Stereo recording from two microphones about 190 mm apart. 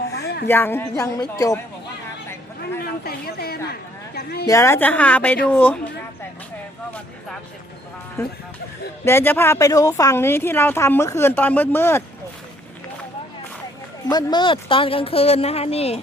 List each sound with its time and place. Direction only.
0.2 s a sound: 60° left (ahead or behind)
0.4 s a woman's voice: 10° left (ahead or behind)
2.6 s a sound: 55° left (ahead or behind)
4.4 s a woman's voice: 15° left (ahead or behind)
8.2 s a woman's voice: 15° left (ahead or behind)
14.1 s a woman's voice: 20° left (ahead or behind)